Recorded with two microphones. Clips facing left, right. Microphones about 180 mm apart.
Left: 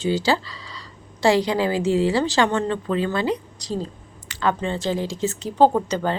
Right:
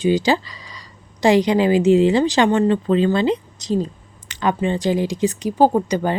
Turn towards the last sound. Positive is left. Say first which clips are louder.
# right 2 dB
turn(degrees=-15)  # may be behind; listen again after turning